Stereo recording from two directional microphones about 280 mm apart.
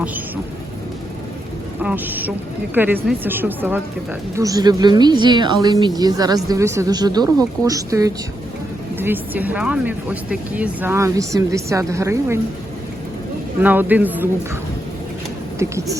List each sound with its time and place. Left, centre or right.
1.8 s speech: centre
13.6 s speech: centre
15.5 s speech: centre